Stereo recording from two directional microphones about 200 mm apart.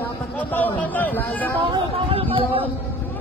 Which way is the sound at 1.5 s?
30° right (ahead or behind).